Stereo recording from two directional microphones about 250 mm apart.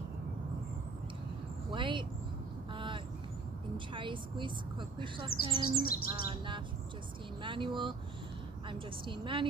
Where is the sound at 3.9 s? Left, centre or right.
Centre.